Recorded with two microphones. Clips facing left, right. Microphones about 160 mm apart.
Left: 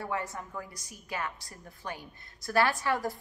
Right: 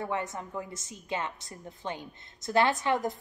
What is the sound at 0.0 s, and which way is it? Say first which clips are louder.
A woman's voice: right 2 dB; 20° right (ahead or behind).